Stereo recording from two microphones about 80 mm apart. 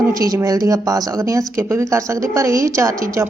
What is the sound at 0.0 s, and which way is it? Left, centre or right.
A woman's voice, right.